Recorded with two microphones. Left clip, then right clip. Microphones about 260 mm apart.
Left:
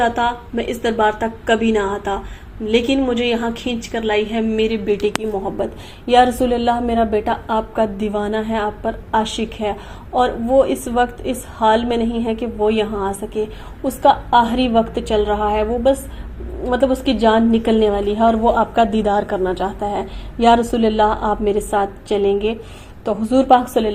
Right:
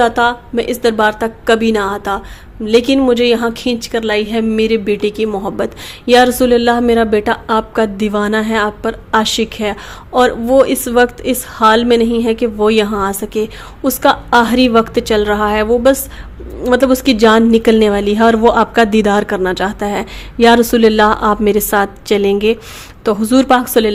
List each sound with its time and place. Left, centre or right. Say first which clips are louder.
0.0 s a woman's voice: right 6 dB; right